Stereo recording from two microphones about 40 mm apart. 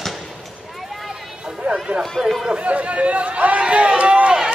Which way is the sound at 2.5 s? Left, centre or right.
Right.